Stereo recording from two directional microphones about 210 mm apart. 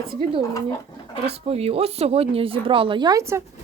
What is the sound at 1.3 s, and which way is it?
A woman's voice, 30° right (ahead or behind).